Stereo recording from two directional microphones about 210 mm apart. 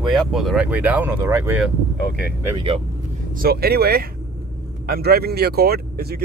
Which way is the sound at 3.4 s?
45° right (ahead or behind).